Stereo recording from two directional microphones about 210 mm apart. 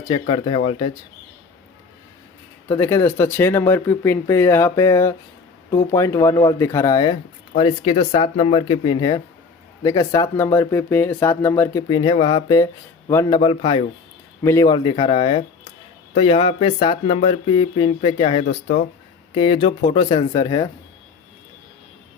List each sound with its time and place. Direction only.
0.1 s speech: 25° left (ahead or behind)
2.6 s speech: 15° left (ahead or behind)
18.4 s speech: 45° left (ahead or behind)
19.3 s speech: 25° left (ahead or behind)